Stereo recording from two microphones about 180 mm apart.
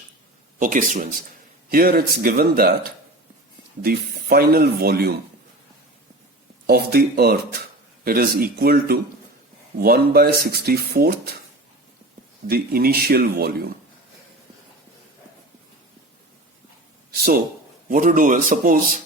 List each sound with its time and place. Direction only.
0.6 s speech: 50° right (ahead or behind)
6.7 s speech: 60° right (ahead or behind)
12.5 s speech: 55° right (ahead or behind)
17.2 s speech: 60° right (ahead or behind)